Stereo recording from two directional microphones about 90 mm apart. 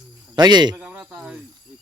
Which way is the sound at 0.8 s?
10° right (ahead or behind).